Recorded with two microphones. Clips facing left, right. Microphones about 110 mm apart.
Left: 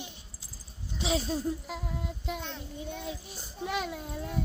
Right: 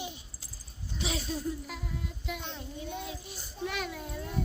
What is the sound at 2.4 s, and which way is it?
Speech, centre (ahead or behind).